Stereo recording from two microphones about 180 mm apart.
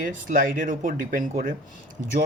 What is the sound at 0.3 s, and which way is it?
Speech, 50° right (ahead or behind).